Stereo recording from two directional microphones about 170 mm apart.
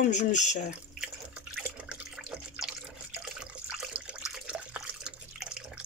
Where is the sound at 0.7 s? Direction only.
5° right (ahead or behind).